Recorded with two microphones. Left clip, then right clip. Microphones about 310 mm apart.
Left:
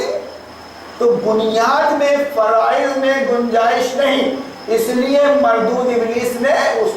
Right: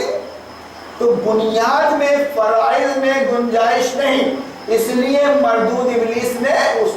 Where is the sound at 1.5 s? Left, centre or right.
Centre.